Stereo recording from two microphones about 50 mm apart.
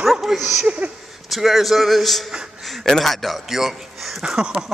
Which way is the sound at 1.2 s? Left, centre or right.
Centre.